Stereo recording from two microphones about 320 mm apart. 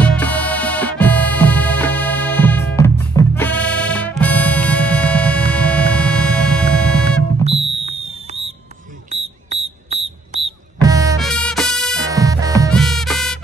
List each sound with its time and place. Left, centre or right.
0.0 s music: centre
7.4 s music: centre
11.1 s music: centre
12.0 s music: centre
12.5 s music: centre